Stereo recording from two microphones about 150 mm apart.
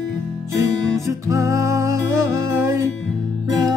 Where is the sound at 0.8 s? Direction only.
25° right (ahead or behind).